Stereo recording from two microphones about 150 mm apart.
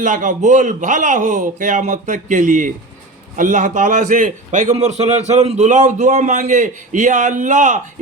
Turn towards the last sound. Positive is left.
turn(degrees=-55)  # may be behind; listen again after turning